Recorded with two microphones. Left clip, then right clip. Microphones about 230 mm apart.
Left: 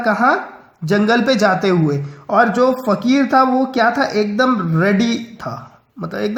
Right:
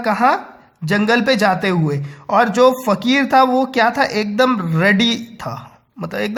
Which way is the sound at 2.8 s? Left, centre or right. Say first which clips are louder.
Even; right.